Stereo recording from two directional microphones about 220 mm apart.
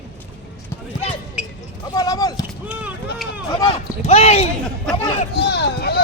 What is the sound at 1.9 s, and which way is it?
Speech, 15° left (ahead or behind).